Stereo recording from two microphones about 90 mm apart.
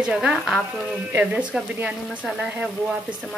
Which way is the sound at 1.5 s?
10° right (ahead or behind).